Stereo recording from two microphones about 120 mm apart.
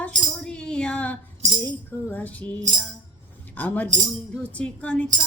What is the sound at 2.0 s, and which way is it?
Music, 15° left (ahead or behind).